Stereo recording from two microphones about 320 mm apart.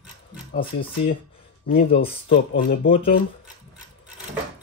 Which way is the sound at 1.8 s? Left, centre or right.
Centre.